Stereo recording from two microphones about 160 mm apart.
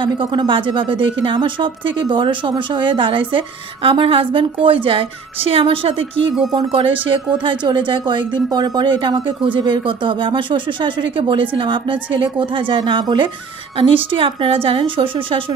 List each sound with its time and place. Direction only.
0.0 s speech: 30° right (ahead or behind)